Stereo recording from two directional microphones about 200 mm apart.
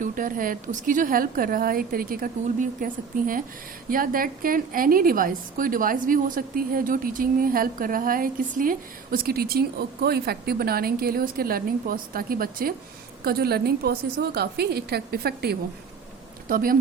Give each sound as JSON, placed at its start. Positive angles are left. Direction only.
{"t": 0.0, "sound": "a woman's voice", "side_deg": -45}